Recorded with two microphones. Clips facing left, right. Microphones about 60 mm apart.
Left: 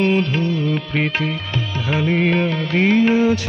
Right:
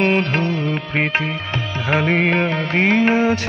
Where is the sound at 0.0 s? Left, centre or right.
Right.